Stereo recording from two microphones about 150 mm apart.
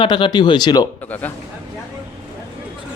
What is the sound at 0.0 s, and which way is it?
Speech, 30° left (ahead or behind).